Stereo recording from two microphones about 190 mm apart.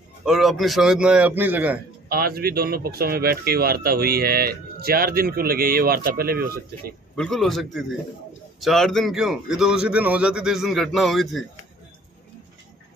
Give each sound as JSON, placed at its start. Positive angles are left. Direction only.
{"t": 0.2, "sound": "a man's voice", "side_deg": 0}
{"t": 2.0, "sound": "speech", "side_deg": -55}
{"t": 7.2, "sound": "a man's voice", "side_deg": 0}